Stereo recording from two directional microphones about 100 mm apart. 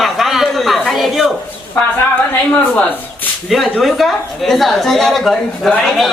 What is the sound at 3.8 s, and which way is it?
A man's voice, centre (ahead or behind).